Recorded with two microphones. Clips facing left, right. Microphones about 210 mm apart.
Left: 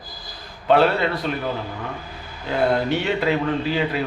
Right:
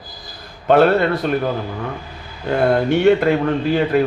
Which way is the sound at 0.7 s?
50° right (ahead or behind).